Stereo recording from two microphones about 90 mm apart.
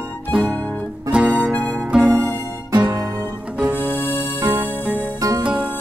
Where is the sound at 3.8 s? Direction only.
25° left (ahead or behind).